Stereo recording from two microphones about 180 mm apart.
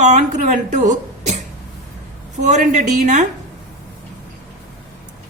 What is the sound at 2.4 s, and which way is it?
Speech, 40° right (ahead or behind).